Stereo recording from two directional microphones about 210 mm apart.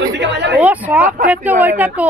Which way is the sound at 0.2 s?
55° right (ahead or behind).